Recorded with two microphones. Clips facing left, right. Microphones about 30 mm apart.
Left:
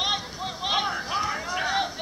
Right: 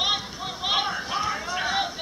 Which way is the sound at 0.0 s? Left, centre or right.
Centre.